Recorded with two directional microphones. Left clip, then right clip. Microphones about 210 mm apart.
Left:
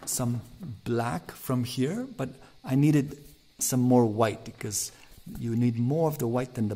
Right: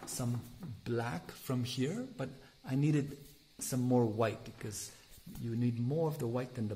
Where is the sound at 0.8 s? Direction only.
35° left (ahead or behind).